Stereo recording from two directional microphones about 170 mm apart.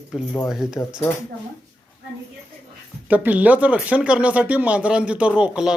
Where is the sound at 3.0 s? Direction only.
10° right (ahead or behind).